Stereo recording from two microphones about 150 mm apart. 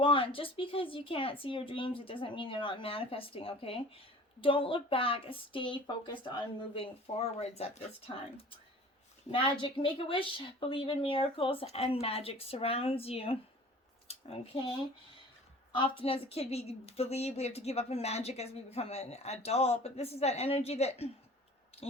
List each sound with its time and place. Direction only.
0.0 s a woman's voice: 35° left (ahead or behind)
15.7 s a woman's voice: 40° left (ahead or behind)